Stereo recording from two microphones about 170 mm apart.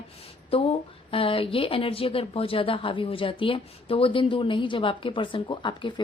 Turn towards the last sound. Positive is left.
turn(degrees=30)  # may be behind; listen again after turning